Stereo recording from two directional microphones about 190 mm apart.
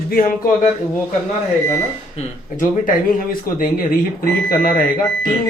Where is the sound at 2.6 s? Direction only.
45° left (ahead or behind).